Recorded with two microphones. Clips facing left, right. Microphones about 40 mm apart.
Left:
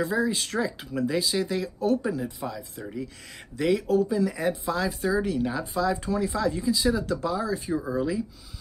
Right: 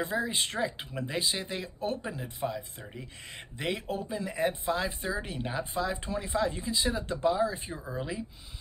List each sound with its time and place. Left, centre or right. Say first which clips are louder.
0.0 s speech: left 5 dB; right
2.8 s speech: left 9 dB; centre
3.5 s speech: left 10 dB; right